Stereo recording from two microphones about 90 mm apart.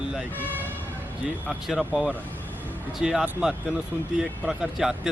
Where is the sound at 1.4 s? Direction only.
5° right (ahead or behind).